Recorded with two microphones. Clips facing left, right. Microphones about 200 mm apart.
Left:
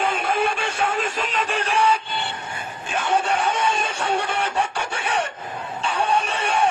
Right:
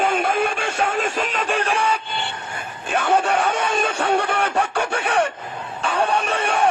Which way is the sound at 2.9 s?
55° right (ahead or behind).